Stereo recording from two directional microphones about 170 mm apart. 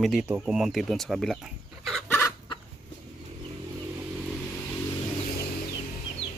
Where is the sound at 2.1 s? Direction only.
15° left (ahead or behind).